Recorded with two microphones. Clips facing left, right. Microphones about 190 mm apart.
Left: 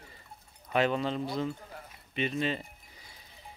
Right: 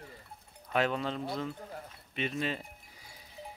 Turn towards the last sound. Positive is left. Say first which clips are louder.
# right 1 dB
turn(degrees=-5)  # may be behind; listen again after turning